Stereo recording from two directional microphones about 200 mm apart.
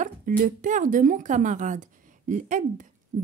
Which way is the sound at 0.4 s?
40° right (ahead or behind).